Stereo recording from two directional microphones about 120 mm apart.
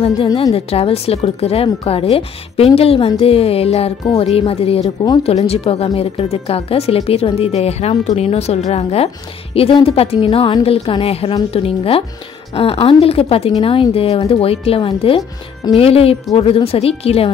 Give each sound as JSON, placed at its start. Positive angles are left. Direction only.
{"t": 0.4, "sound": "speech", "side_deg": 55}